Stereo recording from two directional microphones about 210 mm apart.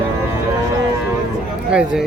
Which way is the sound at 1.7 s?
5° right (ahead or behind).